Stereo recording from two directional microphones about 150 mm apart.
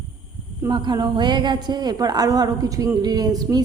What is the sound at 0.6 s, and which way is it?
A woman's voice, 30° right (ahead or behind).